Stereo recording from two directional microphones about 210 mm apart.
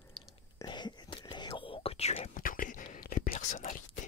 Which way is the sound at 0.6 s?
20° left (ahead or behind).